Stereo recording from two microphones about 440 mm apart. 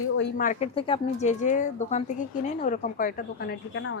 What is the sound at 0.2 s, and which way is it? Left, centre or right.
Speech, centre.